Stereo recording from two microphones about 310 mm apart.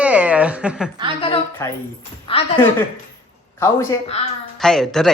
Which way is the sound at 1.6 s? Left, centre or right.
Centre.